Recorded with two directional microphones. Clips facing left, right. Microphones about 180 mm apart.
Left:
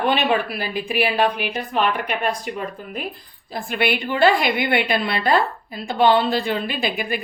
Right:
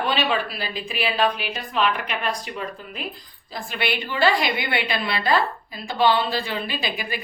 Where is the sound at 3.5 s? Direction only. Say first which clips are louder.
Left 5 dB; 50° left (ahead or behind).